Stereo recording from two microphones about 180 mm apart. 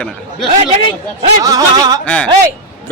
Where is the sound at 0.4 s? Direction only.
35° right (ahead or behind).